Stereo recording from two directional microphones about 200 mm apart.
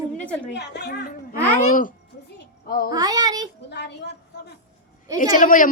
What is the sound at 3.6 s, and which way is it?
Speech, 55° left (ahead or behind).